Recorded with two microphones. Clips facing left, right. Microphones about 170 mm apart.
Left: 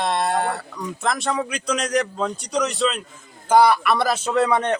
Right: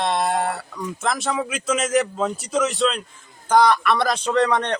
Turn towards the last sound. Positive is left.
turn(degrees=5)  # may be behind; listen again after turning